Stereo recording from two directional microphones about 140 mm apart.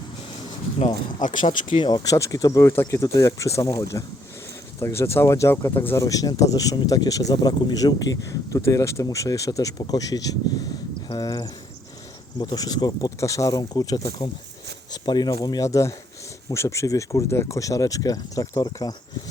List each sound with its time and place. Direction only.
1.2 s speech: 65° left (ahead or behind)
1.7 s speech: 35° left (ahead or behind)